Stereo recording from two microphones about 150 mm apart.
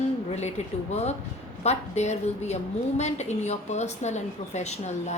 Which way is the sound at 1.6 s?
45° left (ahead or behind).